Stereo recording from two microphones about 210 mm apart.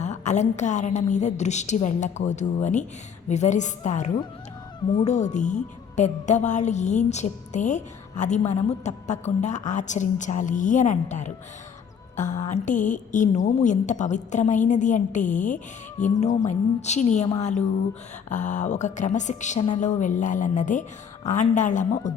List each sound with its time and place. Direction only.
0.0 s a woman's voice: 35° left (ahead or behind)
18.3 s a woman's voice: 35° left (ahead or behind)